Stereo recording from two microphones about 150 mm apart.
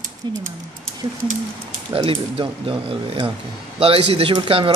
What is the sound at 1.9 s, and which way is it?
Speech, 40° right (ahead or behind).